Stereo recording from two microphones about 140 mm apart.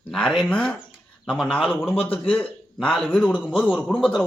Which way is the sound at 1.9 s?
45° left (ahead or behind).